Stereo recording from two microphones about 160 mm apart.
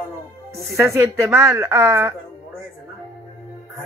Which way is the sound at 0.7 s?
15° right (ahead or behind).